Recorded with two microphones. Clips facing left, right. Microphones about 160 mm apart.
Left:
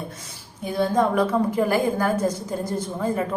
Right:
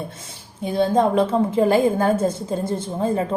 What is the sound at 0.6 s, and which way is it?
A woman's voice, 25° right (ahead or behind).